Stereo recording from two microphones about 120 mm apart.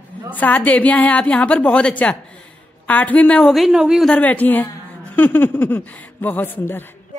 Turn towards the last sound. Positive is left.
turn(degrees=20)  # may be behind; listen again after turning